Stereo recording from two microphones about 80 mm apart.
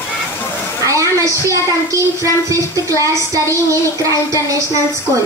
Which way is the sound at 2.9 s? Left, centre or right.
Right.